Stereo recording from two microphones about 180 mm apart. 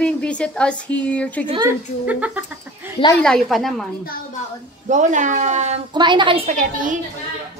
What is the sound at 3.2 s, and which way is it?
Speech, 5° left (ahead or behind).